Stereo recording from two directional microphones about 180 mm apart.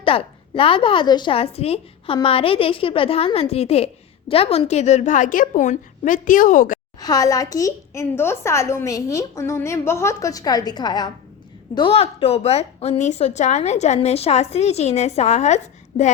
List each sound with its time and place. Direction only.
0.0 s a woman's voice: 30° left (ahead or behind); by 6.7 s 50° left (ahead or behind)
7.0 s a woman's voice: 20° left (ahead or behind); by 16.1 s 40° left (ahead or behind)